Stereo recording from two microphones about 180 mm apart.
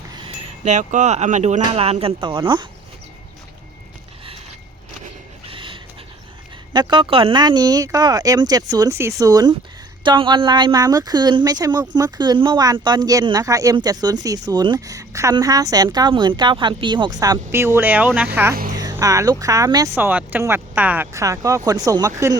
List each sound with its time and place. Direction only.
0.6 s speech: 40° right (ahead or behind); by 2.6 s 25° right (ahead or behind)
5.5 s a sound: 30° right (ahead or behind)
6.7 s speech: 25° right (ahead or behind); by 18.3 s 10° right (ahead or behind)
18.7 s speech: 20° right (ahead or behind)